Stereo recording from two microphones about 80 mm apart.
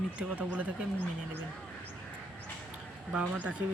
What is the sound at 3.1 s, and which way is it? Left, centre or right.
Speech, centre.